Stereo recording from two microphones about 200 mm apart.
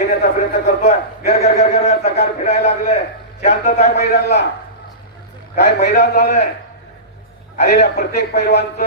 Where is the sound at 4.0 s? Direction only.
60° left (ahead or behind).